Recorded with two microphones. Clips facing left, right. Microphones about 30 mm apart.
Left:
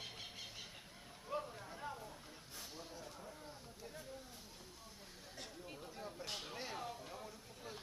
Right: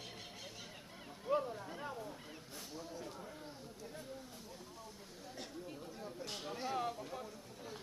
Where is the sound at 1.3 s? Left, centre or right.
Centre.